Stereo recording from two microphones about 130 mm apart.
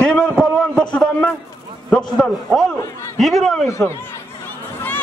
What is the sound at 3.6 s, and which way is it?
Speech, 25° left (ahead or behind).